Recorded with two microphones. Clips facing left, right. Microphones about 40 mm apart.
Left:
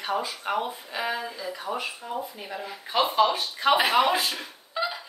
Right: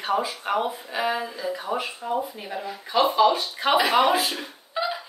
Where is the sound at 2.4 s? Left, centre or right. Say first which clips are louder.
Right 3 dB; centre.